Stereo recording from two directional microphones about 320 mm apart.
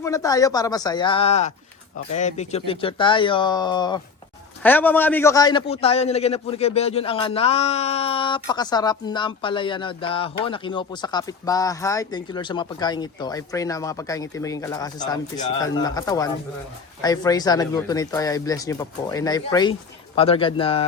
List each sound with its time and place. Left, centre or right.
0.0 s a man's voice: centre